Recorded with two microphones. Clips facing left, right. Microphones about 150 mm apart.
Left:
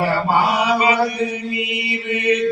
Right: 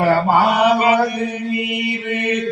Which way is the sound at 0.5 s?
55° right (ahead or behind).